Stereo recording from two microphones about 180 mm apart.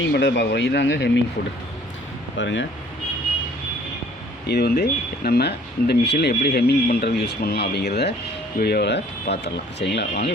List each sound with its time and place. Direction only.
0.0 s speech: 80° left
2.4 s speech: 90° left
4.4 s speech: 65° left (ahead or behind)